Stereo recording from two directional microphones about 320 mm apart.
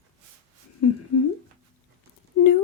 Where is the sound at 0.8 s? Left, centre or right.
Left.